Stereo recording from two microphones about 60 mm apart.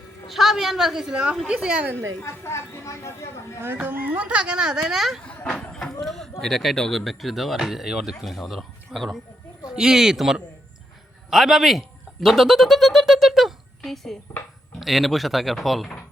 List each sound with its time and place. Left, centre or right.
0.3 s a woman's voice: centre
2.2 s speech: left
3.6 s speech: right; by 5.2 s centre
5.2 s speech: centre
5.5 s a sound: centre
6.0 s a woman's voice: centre